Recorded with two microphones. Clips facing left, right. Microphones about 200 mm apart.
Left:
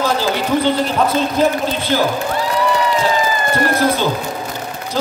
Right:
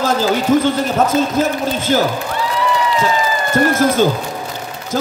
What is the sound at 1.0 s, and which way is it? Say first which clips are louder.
A man's voice: right 1 dB; 45° right (ahead or behind).